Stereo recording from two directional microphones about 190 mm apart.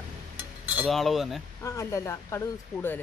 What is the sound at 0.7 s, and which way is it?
Cutlery, 5° right (ahead or behind).